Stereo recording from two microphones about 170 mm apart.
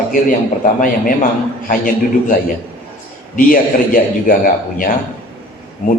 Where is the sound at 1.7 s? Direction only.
55° left (ahead or behind).